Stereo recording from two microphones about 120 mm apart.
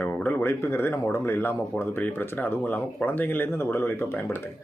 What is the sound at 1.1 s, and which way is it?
Speech, 20° left (ahead or behind).